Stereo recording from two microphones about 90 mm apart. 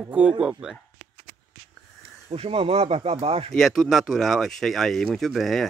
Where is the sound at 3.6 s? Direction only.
Centre (ahead or behind).